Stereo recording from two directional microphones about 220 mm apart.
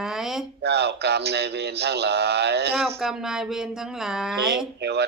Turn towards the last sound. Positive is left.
turn(degrees=-50)  # may be behind; listen again after turning